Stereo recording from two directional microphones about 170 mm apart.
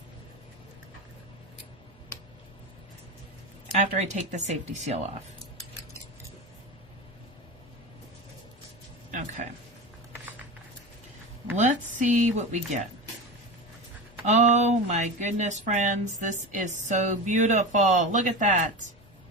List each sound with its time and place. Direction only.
3.8 s speech: 40° right (ahead or behind)
11.5 s speech: 45° right (ahead or behind)
14.3 s speech: 45° right (ahead or behind)